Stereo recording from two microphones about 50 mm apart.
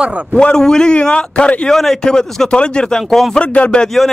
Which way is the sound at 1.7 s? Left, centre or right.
Centre.